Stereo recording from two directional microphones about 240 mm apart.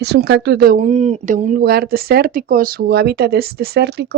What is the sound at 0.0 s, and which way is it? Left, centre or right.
Speech, right.